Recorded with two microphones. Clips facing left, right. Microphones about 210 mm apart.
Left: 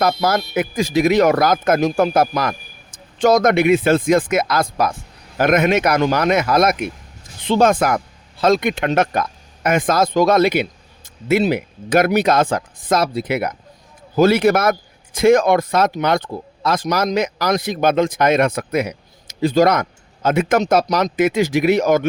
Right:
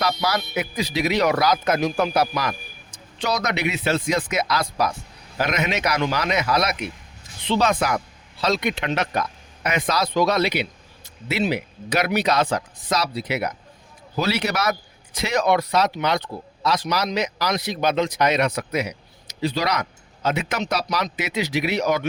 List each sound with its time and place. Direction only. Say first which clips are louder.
0.0 s a man's voice: left 6 dB; 50° left (ahead or behind)